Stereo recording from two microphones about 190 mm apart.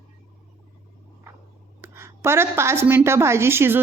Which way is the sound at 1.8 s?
15° right (ahead or behind).